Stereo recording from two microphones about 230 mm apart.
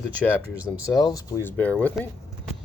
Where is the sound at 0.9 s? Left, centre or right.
Centre.